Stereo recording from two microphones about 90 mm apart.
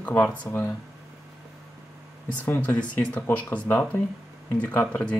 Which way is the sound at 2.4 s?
20° left (ahead or behind).